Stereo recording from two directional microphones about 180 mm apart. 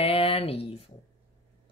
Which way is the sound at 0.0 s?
30° left (ahead or behind).